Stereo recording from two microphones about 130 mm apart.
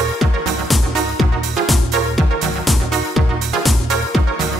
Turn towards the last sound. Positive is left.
turn(degrees=0)  # may be behind; listen again after turning